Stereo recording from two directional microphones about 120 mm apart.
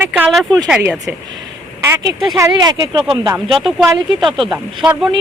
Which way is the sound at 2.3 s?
30° right (ahead or behind).